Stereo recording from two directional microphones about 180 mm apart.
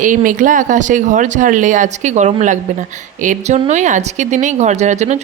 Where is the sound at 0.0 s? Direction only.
50° right (ahead or behind).